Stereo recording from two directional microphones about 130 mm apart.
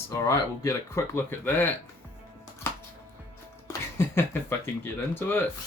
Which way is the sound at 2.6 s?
20° left (ahead or behind).